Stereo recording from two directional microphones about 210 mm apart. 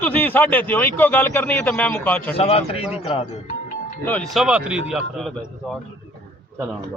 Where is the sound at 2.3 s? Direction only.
30° left (ahead or behind).